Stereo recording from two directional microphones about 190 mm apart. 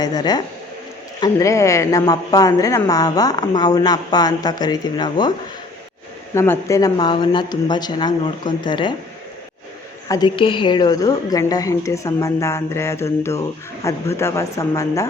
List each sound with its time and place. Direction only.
0.0 s a woman's voice: 20° left (ahead or behind)
6.3 s a woman's voice: 15° left (ahead or behind)
10.1 s a woman's voice: 20° left (ahead or behind)